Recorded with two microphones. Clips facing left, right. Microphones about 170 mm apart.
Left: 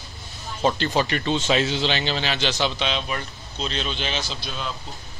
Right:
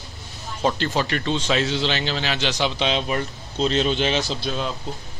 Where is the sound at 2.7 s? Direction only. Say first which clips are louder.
Right 4 dB; 25° right (ahead or behind).